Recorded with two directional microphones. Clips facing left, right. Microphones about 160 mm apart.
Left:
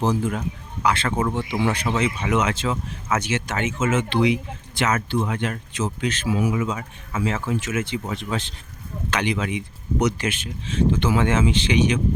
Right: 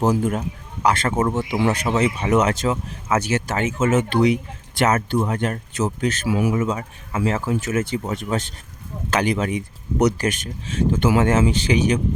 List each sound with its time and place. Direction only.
0.0 s speech: 45° right (ahead or behind)